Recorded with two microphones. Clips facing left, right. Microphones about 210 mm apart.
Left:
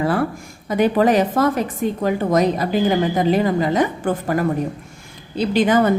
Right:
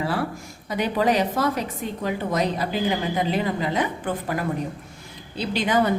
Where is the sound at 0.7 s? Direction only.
50° left (ahead or behind).